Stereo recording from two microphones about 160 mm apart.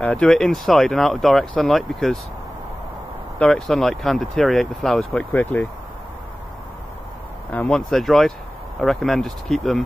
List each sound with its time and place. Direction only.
0.0 s speech: 5° left (ahead or behind)
3.3 s speech: 5° left (ahead or behind)
7.5 s speech: 5° left (ahead or behind)